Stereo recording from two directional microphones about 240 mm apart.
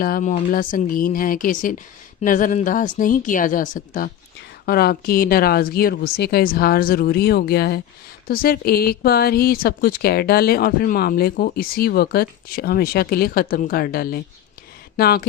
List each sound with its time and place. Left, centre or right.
0.0 s speech: left